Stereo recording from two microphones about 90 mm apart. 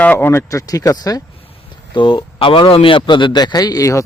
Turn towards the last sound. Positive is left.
turn(degrees=40)  # may be behind; listen again after turning